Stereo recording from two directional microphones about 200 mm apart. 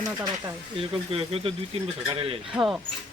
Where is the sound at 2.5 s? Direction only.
5° right (ahead or behind).